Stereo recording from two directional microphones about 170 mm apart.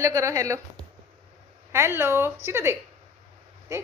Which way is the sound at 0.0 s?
20° right (ahead or behind).